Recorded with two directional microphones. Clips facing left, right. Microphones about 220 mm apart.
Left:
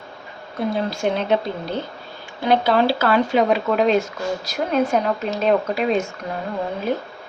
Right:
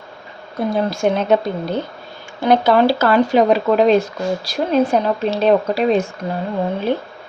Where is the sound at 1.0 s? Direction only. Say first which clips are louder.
Right 4 dB; 50° right (ahead or behind).